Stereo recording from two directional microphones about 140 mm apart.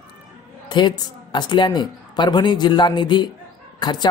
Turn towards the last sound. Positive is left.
turn(degrees=30)  # may be behind; listen again after turning